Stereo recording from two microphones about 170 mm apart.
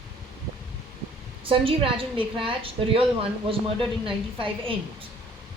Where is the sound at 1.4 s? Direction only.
30° right (ahead or behind).